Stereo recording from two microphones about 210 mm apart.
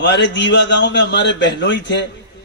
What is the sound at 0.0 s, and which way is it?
A man's voice, 55° left (ahead or behind).